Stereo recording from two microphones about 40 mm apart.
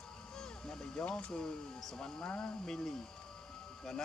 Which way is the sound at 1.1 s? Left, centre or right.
Left.